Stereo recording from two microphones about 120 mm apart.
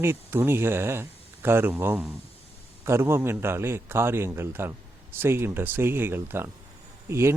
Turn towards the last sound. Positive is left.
turn(degrees=-20)  # may be behind; listen again after turning